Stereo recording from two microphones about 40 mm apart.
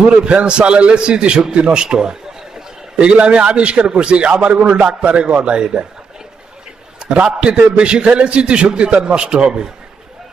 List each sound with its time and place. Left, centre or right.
0.2 s a man's voice: right
7.3 s a man's voice: right